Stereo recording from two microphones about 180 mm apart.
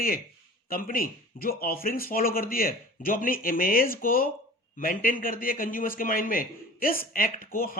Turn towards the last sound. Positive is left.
turn(degrees=55)  # may be behind; listen again after turning